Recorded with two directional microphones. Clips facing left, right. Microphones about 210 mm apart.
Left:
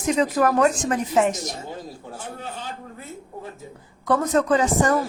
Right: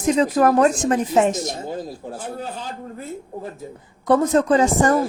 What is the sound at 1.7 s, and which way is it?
A woman's voice, 35° right (ahead or behind).